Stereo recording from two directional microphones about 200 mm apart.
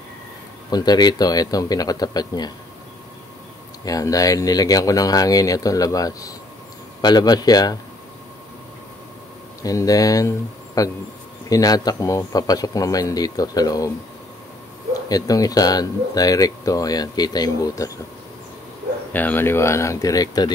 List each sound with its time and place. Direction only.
0.7 s speech: 20° left (ahead or behind)
3.8 s speech: 15° left (ahead or behind)
9.6 s speech: 15° left (ahead or behind)
15.0 s speech: 20° left (ahead or behind)
19.1 s speech: 10° left (ahead or behind)